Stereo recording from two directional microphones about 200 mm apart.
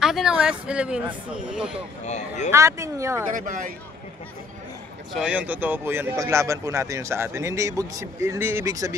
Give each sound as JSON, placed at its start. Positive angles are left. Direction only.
{"t": 0.0, "sound": "speech", "side_deg": 0}
{"t": 2.0, "sound": "speech", "side_deg": 35}
{"t": 2.5, "sound": "speech", "side_deg": -15}
{"t": 3.3, "sound": "speech", "side_deg": -40}
{"t": 5.1, "sound": "speech", "side_deg": -5}